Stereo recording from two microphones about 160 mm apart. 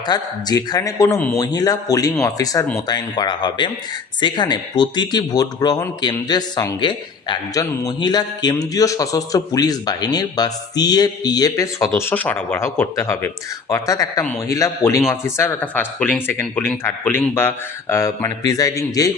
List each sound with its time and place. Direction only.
0.1 s speech: 25° left (ahead or behind)